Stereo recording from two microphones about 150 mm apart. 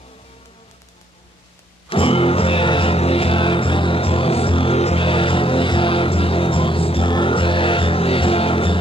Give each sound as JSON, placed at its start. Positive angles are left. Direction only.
{"t": 1.9, "sound": "music", "side_deg": 35}